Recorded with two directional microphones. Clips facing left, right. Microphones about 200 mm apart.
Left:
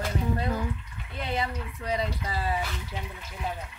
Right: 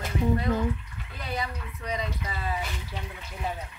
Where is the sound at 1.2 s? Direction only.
25° left (ahead or behind).